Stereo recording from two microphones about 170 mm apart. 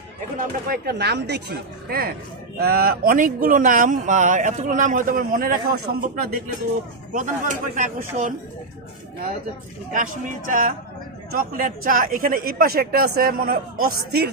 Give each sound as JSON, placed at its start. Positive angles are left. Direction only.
{"t": 0.7, "sound": "speech", "side_deg": -75}
{"t": 9.9, "sound": "speech", "side_deg": -50}